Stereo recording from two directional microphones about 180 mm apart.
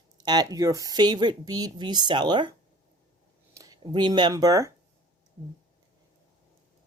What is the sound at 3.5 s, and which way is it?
Speech, 20° right (ahead or behind).